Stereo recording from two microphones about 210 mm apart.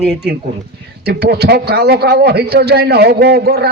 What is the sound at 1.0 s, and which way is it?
A man's voice, 50° right (ahead or behind).